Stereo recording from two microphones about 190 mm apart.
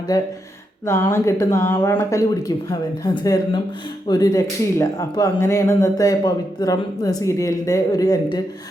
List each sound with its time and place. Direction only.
0.1 s speech: 20° left (ahead or behind)